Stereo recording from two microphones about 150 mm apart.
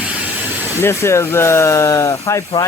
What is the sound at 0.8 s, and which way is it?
Speech, 20° left (ahead or behind).